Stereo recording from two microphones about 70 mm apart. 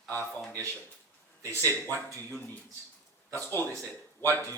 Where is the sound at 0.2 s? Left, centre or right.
Left.